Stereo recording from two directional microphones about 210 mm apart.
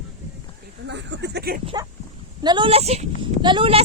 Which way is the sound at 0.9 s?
55° right (ahead or behind).